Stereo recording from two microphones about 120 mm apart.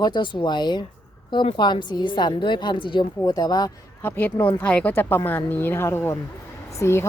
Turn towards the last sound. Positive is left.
turn(degrees=25)  # may be behind; listen again after turning